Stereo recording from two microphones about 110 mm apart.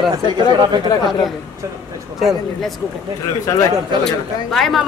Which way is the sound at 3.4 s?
35° left (ahead or behind).